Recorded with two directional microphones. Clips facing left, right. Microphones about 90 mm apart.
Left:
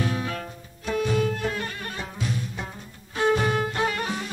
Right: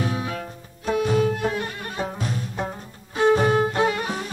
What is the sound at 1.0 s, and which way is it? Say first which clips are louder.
Music: right 3 dB; 25° right (ahead or behind).